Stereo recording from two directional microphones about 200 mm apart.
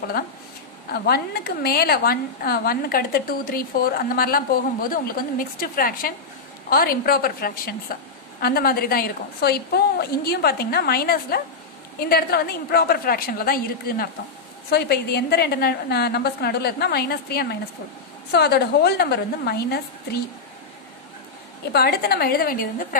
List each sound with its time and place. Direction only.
0.9 s a woman's voice: 50° left (ahead or behind)
21.7 s a woman's voice: 50° left (ahead or behind)